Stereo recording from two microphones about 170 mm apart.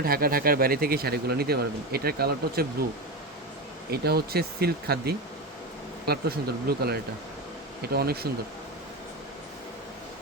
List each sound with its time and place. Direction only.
0.0 s speech: 60° right (ahead or behind)
3.9 s speech: 65° right (ahead or behind)